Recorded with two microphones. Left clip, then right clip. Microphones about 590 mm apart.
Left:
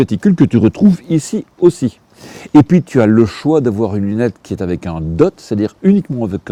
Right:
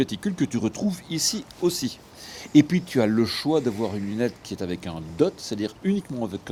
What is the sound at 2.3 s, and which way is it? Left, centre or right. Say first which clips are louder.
Speech: left 9 dB; left.